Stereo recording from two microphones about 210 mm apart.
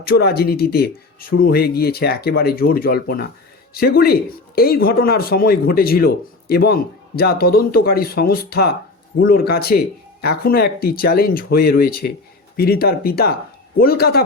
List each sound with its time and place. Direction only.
0.0 s speech: 50° left (ahead or behind)